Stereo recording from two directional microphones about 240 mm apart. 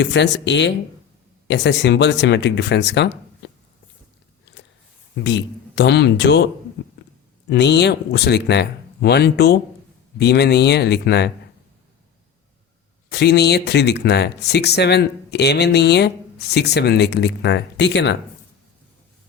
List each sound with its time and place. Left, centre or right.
0.0 s speech: left
5.2 s speech: left
13.1 s speech: left